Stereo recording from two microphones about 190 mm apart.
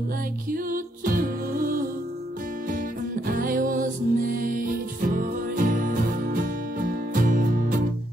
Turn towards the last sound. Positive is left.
turn(degrees=-45)  # may be behind; listen again after turning